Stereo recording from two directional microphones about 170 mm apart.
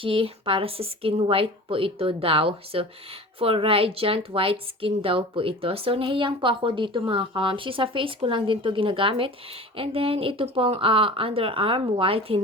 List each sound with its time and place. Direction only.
0.0 s a woman's voice: 30° right (ahead or behind)